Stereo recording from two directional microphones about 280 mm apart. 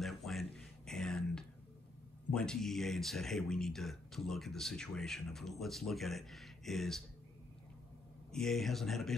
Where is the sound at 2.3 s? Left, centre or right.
Centre.